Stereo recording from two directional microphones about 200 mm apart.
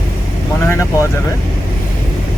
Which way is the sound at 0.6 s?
15° left (ahead or behind).